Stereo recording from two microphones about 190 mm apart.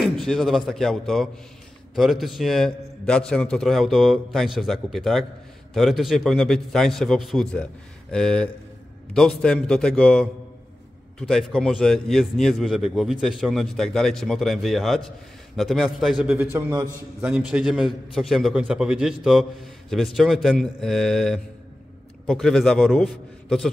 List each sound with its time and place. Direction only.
0.0 s a man's voice: centre (ahead or behind)